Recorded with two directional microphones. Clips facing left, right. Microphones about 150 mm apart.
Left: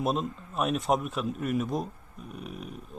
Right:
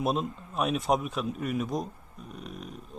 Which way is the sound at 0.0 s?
Centre (ahead or behind).